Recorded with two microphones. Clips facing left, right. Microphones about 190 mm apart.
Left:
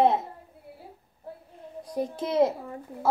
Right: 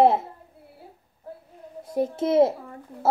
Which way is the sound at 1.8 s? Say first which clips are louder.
Right 5 dB; 25° right (ahead or behind).